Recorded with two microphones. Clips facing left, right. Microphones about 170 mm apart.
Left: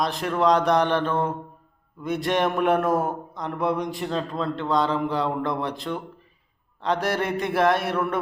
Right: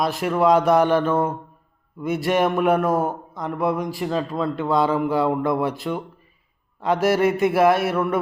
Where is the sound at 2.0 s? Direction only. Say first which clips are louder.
Right 3 dB; 5° right (ahead or behind).